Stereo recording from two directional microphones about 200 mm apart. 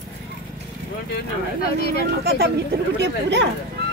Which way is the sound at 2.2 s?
50° right (ahead or behind).